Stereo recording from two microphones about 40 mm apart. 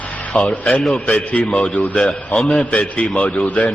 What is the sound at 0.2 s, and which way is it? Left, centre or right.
A man's voice, left.